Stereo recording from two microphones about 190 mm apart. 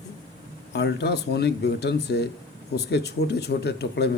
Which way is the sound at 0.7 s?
65° left (ahead or behind).